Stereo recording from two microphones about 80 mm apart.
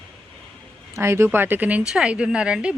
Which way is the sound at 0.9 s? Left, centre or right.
Right.